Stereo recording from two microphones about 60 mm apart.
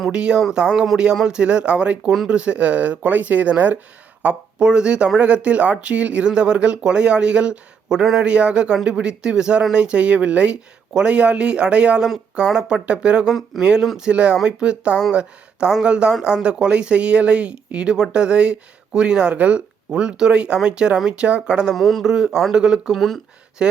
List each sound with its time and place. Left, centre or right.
0.1 s speech: centre
8.2 s speech: centre
21.7 s speech: centre
22.0 s speech: centre
23.0 s speech: centre
23.6 s a sound: centre